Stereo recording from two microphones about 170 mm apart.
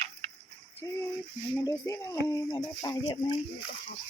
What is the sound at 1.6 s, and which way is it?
Speech, 20° left (ahead or behind).